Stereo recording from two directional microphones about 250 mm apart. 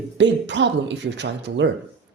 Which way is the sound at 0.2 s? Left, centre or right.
Right.